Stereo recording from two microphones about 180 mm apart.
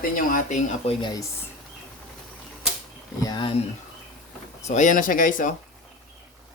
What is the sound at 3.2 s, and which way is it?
Speech, 25° left (ahead or behind).